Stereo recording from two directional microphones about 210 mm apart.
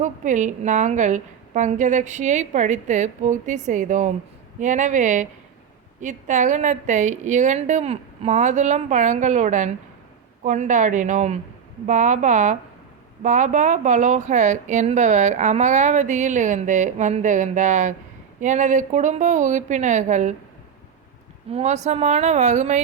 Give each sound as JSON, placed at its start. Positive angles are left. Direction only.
{"t": 0.0, "sound": "speech", "side_deg": -35}
{"t": 21.5, "sound": "speech", "side_deg": -35}